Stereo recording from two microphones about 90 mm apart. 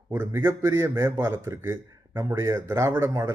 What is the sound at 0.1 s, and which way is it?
A man's voice, 25° right (ahead or behind).